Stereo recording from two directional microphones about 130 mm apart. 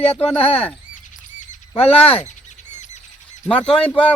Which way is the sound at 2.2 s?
65° left (ahead or behind).